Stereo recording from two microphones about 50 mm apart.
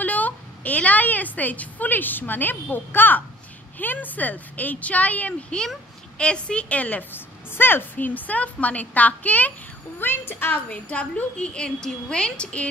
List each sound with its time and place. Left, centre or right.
0.0 s a woman's voice: left
5.5 s a woman's voice: left
7.1 s a woman's voice: left
9.9 s a woman's voice: left
10.5 s a woman's voice: left